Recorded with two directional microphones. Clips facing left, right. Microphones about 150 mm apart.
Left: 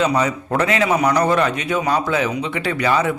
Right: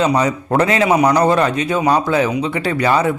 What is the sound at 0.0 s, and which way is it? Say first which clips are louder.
A man's voice: right 2 dB; 35° right (ahead or behind).